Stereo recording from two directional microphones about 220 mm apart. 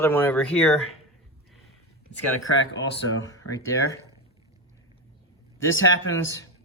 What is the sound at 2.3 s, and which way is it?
Speech, 55° left (ahead or behind).